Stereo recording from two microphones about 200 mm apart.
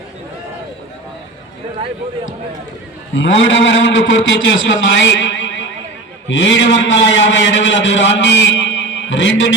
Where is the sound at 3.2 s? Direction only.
65° left (ahead or behind).